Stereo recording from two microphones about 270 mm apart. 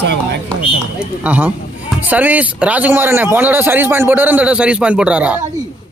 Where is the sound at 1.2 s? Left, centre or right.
Centre.